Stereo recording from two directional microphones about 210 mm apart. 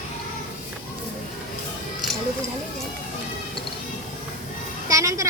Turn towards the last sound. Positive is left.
turn(degrees=-15)  # may be behind; listen again after turning